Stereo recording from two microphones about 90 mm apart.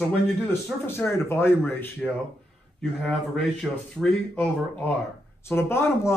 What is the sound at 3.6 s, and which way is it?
Speech, 5° right (ahead or behind).